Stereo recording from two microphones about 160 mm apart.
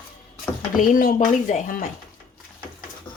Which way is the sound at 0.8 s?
60° left (ahead or behind).